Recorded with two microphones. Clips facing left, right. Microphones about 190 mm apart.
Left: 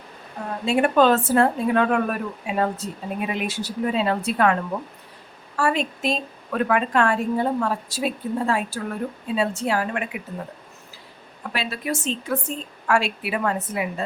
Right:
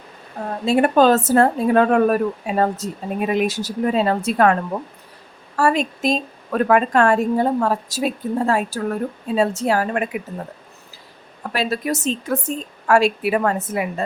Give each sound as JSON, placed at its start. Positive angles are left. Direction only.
{"t": 0.6, "sound": "speech", "side_deg": -40}
{"t": 5.5, "sound": "speech", "side_deg": -40}
{"t": 11.5, "sound": "a woman's voice", "side_deg": -40}